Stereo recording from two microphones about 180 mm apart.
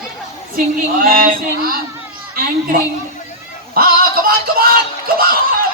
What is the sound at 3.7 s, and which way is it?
Speech, 55° right (ahead or behind).